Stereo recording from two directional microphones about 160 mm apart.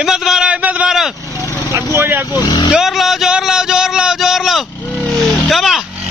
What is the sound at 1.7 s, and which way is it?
Speech, 15° right (ahead or behind).